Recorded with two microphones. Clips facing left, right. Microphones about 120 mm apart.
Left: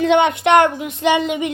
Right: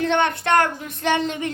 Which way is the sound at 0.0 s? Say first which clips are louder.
Left 6 dB; 15° left (ahead or behind).